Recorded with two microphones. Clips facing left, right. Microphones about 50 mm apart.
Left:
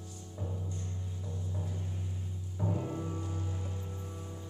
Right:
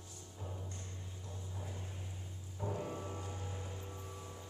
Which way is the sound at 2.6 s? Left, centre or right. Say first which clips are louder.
Left 5 dB; centre.